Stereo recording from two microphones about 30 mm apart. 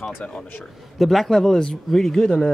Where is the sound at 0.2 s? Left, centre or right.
Left.